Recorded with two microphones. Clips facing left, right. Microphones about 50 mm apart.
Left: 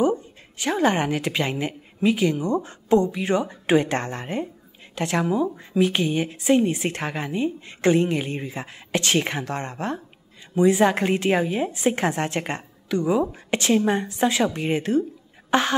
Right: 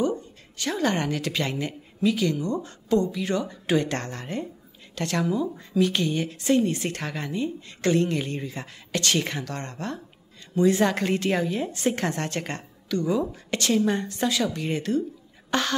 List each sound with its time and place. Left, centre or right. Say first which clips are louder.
0.0 s a woman's voice: left 4 dB; centre
14.2 s a woman's voice: left 4 dB; left